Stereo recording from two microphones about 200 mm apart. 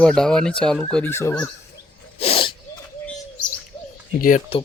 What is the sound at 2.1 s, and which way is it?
Sneeze, 30° left (ahead or behind).